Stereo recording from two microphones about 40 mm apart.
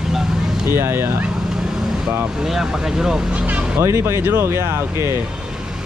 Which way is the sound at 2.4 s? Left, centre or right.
Centre.